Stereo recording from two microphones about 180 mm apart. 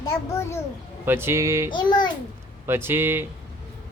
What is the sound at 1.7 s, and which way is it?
Speech, 25° left (ahead or behind).